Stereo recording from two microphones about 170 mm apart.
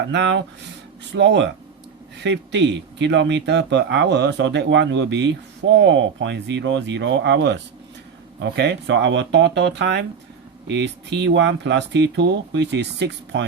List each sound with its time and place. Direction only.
0.1 s speech: 90° right